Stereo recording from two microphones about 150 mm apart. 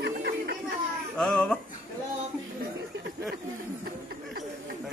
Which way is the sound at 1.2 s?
5° left (ahead or behind).